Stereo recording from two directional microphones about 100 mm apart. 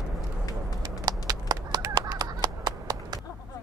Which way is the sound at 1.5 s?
40° right (ahead or behind).